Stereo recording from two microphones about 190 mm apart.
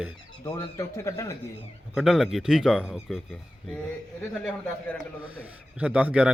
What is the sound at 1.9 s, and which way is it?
Speech, centre (ahead or behind).